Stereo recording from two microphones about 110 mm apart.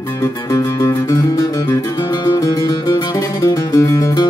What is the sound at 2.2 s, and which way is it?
Music, 30° left (ahead or behind).